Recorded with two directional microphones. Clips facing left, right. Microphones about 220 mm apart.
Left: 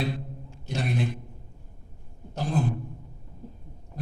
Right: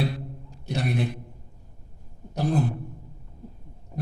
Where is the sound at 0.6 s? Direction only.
60° right (ahead or behind).